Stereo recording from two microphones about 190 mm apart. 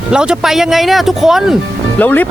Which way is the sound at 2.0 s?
10° left (ahead or behind).